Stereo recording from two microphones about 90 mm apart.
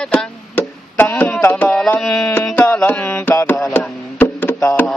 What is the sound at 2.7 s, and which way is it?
Mantra, 20° left (ahead or behind).